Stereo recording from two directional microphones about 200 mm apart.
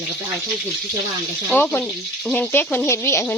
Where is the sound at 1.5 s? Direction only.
10° left (ahead or behind).